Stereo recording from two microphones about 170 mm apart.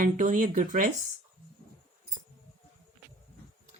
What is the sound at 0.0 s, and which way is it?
Speech, 50° right (ahead or behind).